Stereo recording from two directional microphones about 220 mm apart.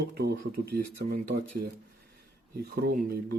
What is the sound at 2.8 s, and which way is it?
Speech, 45° right (ahead or behind).